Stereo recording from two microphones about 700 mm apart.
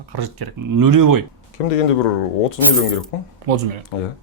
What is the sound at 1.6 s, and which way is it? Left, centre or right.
Speech, left.